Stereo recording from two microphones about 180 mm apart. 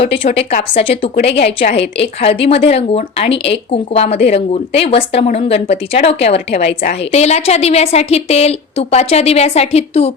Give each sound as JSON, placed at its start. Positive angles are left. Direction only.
{"t": 0.0, "sound": "a woman's voice", "side_deg": 30}